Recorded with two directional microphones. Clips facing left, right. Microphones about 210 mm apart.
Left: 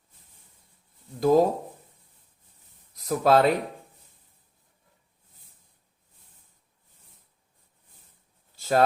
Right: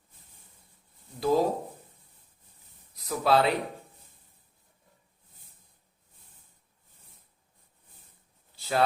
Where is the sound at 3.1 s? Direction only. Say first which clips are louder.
Left 4 dB; 45° left (ahead or behind).